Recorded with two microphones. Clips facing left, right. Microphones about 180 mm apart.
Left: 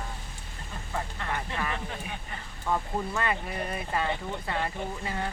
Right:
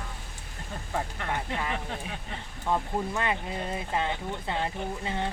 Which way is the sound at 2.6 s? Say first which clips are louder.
Right 1 dB; 20° right (ahead or behind).